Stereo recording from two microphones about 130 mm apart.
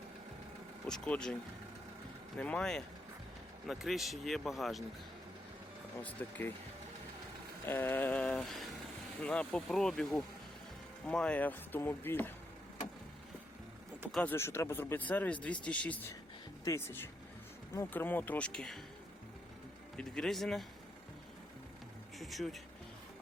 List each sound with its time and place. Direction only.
0.9 s speech: 5° left (ahead or behind)
2.4 s speech: 10° left (ahead or behind)
6.0 s speech: 10° left (ahead or behind)
7.7 s speech: 15° left (ahead or behind)
14.2 s speech: 15° left (ahead or behind)
20.0 s speech: 5° left (ahead or behind)
22.2 s speech: centre (ahead or behind)